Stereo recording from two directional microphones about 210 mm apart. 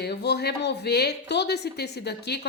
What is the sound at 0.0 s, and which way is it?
Speech, 50° left (ahead or behind).